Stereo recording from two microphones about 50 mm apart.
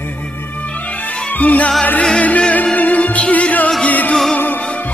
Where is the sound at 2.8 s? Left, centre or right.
Left.